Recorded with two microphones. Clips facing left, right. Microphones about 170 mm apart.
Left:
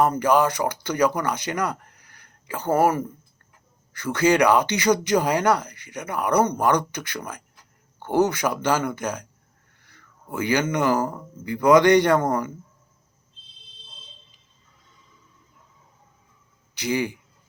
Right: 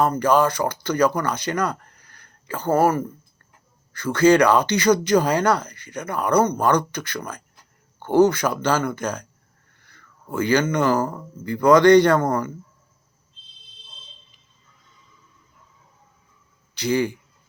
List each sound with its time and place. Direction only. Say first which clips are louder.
0.0 s speech: right 1 dB; 15° left (ahead or behind)
16.7 s speech: right 3 dB; 15° left (ahead or behind)